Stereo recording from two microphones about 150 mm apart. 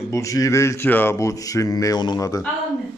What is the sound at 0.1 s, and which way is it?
Speech, 20° left (ahead or behind).